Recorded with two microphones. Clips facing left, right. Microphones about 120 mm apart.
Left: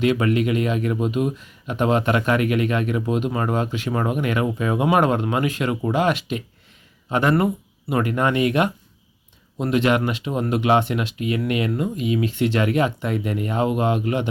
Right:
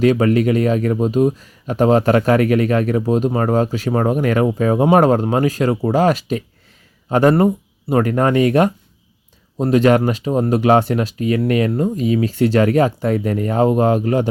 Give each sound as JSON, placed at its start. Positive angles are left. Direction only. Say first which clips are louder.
{"t": 0.0, "sound": "speech", "louder": "right 5 dB", "side_deg": -40}